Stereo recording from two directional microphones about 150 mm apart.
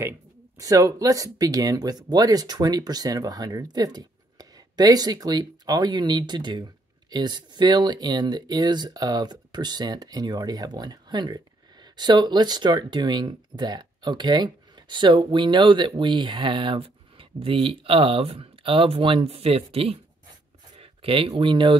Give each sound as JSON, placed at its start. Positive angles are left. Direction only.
{"t": 0.6, "sound": "speech", "side_deg": -25}